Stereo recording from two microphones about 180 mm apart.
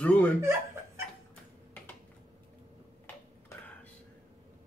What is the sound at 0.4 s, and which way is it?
Laughter, 15° right (ahead or behind).